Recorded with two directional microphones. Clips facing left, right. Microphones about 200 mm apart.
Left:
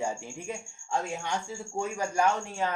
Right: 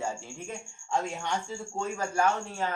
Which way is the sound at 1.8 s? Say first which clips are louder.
Left 1 dB; 15° left (ahead or behind).